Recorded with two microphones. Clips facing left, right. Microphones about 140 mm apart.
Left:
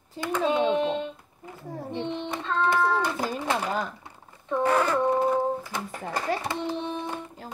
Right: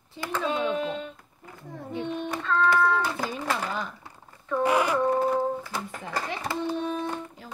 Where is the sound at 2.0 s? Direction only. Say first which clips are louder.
Right 4 dB; 25° left (ahead or behind).